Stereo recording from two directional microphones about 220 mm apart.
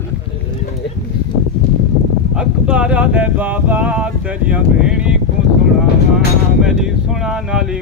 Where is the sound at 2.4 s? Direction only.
5° right (ahead or behind).